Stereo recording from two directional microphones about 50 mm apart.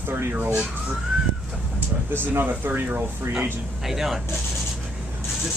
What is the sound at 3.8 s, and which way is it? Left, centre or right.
Speech, centre.